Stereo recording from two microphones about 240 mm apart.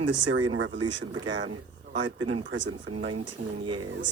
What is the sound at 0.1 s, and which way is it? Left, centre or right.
Speech, right.